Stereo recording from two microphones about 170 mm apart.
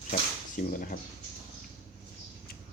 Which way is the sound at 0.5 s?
55° left (ahead or behind).